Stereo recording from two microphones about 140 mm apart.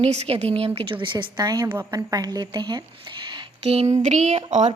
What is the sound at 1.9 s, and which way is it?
Speech, 25° right (ahead or behind).